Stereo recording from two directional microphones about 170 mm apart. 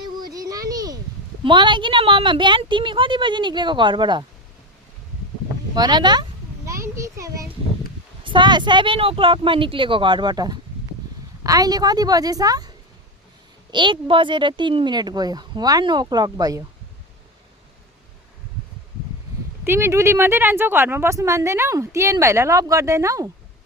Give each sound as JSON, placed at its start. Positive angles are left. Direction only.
{"t": 0.3, "sound": "a sound", "side_deg": -20}
{"t": 1.5, "sound": "speech", "side_deg": -30}
{"t": 5.7, "sound": "speech", "side_deg": -25}
{"t": 6.8, "sound": "a sound", "side_deg": -15}
{"t": 8.2, "sound": "speech", "side_deg": -30}
{"t": 19.6, "sound": "speech", "side_deg": -15}